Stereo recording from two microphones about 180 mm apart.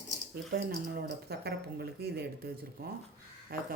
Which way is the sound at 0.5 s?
60° right (ahead or behind).